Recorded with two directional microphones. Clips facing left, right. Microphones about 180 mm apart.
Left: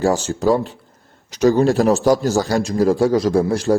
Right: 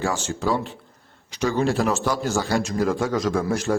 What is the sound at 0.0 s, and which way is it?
A man's voice, 40° left (ahead or behind).